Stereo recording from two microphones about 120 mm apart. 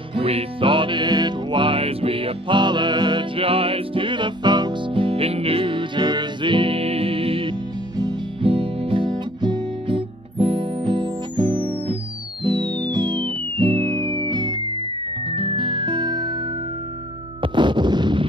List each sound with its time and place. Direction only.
0.1 s music: 55° right (ahead or behind); by 14.6 s 35° right (ahead or behind)
15.2 s music: 50° right (ahead or behind)
17.4 s a sound: 40° right (ahead or behind)